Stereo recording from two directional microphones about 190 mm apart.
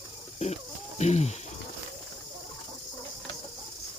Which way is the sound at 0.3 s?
35° left (ahead or behind).